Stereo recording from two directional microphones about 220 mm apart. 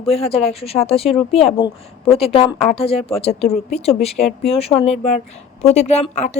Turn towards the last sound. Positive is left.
turn(degrees=30)  # may be behind; listen again after turning